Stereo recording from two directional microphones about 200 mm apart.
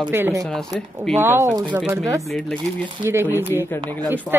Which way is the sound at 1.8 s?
5° right (ahead or behind).